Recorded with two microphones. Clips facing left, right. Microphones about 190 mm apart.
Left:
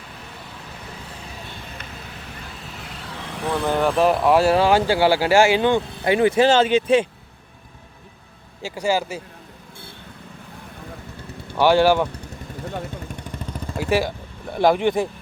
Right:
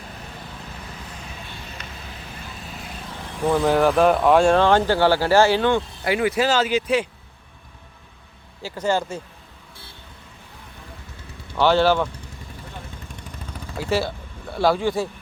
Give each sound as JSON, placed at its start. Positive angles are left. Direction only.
{"t": 3.6, "sound": "speech", "side_deg": -5}
{"t": 6.1, "sound": "speech", "side_deg": 25}
{"t": 8.6, "sound": "speech", "side_deg": 10}
{"t": 11.5, "sound": "speech", "side_deg": 15}
{"t": 13.7, "sound": "speech", "side_deg": 15}